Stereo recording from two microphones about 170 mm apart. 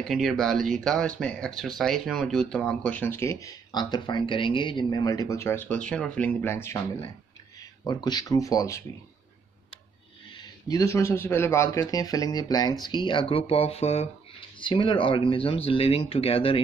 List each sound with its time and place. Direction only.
0.0 s speech: centre (ahead or behind); by 8.8 s 20° left (ahead or behind)
10.3 s speech: 20° left (ahead or behind)